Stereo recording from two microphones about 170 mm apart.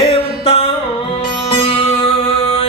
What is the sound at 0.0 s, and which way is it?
Music, 35° left (ahead or behind).